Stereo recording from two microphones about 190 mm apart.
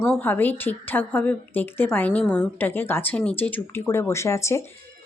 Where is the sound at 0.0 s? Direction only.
5° left (ahead or behind).